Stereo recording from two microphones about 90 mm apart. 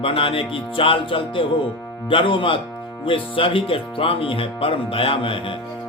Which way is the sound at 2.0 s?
70° left (ahead or behind).